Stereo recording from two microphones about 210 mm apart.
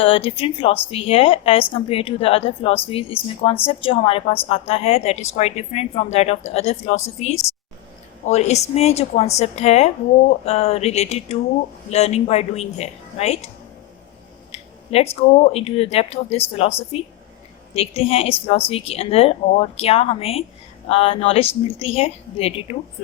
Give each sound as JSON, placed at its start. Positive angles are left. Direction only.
{"t": 0.0, "sound": "a woman's voice", "side_deg": 25}
{"t": 14.5, "sound": "a woman's voice", "side_deg": 30}